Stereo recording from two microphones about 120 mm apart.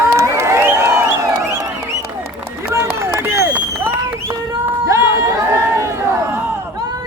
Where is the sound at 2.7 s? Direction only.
20° right (ahead or behind).